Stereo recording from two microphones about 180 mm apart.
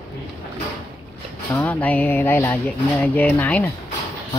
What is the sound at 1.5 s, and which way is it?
Music, 10° left (ahead or behind).